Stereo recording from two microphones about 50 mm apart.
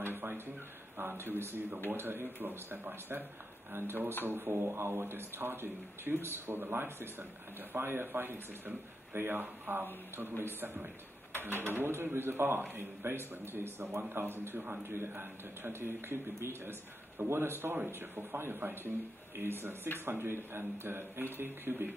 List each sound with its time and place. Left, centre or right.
0.0 s a sound: right
0.9 s speech: right
17.3 s speech: right